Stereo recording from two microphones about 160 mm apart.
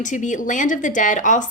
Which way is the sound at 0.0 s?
50° left (ahead or behind).